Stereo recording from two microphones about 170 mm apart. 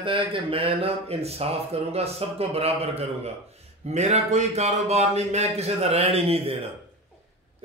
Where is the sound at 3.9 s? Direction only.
40° right (ahead or behind).